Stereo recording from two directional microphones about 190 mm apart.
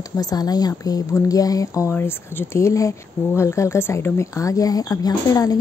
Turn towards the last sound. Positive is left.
turn(degrees=20)  # may be behind; listen again after turning